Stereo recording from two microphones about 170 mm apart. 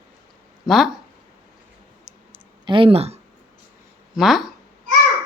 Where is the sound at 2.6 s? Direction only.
30° right (ahead or behind).